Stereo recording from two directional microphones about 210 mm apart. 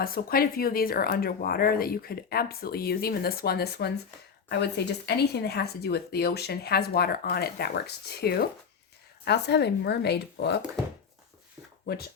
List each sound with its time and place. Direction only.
0.0 s speech: 45° left (ahead or behind)